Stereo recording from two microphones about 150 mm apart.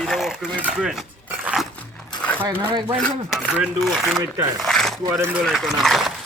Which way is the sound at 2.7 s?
30° right (ahead or behind).